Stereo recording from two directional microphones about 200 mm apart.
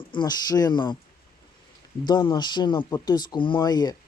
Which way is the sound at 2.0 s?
20° left (ahead or behind).